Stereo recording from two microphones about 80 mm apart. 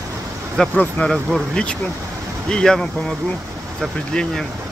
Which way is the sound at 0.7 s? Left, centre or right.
Centre.